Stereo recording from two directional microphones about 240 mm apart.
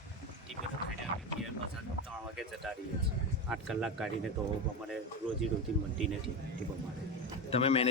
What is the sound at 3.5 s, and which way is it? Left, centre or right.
Speech, centre.